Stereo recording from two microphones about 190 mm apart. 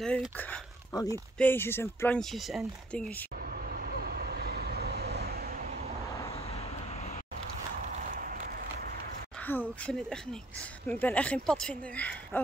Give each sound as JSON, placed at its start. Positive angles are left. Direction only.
{"t": 0.0, "sound": "speech", "side_deg": 5}
{"t": 3.6, "sound": "vehicle", "side_deg": -50}
{"t": 9.5, "sound": "speech", "side_deg": 10}